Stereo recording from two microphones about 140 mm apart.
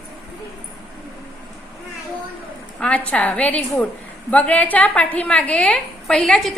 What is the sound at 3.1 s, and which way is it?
A woman's voice, 10° left (ahead or behind).